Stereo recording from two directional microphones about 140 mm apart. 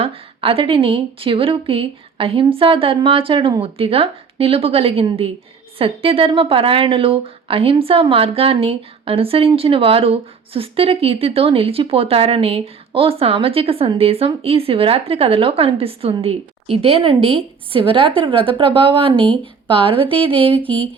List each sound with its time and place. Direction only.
0.0 s a woman's voice: 40° right (ahead or behind)